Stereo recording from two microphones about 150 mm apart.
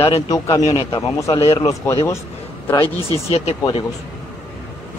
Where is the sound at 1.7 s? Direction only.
20° left (ahead or behind).